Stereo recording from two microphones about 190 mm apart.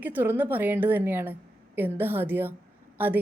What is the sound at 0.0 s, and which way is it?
A woman's voice, 10° right (ahead or behind).